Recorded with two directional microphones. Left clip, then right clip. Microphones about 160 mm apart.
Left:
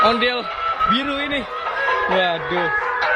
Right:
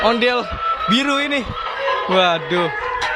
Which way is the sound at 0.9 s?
45° right (ahead or behind).